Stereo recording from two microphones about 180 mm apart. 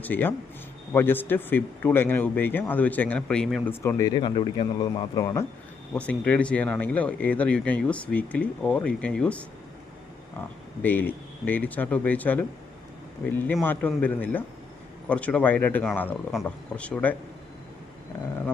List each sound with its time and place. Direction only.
0.0 s speech: 10° left (ahead or behind)
3.7 s speech: 15° left (ahead or behind)
10.8 s speech: 10° left (ahead or behind)